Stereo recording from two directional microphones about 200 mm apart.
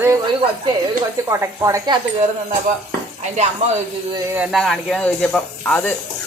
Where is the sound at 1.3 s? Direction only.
15° right (ahead or behind).